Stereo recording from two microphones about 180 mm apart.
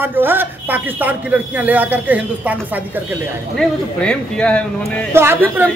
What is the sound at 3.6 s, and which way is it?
Speech, 5° left (ahead or behind).